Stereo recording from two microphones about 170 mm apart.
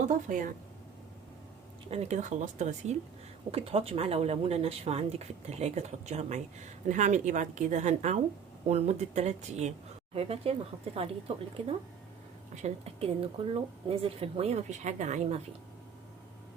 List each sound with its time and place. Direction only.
0.1 s a woman's voice: 50° right (ahead or behind)
1.9 s a woman's voice: 40° right (ahead or behind)
12.6 s speech: 35° right (ahead or behind)